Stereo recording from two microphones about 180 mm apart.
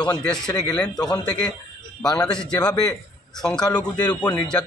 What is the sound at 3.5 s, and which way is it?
Speech, 20° left (ahead or behind).